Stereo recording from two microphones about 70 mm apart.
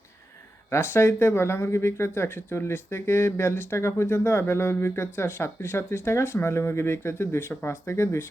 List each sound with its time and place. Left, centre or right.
0.7 s speech: left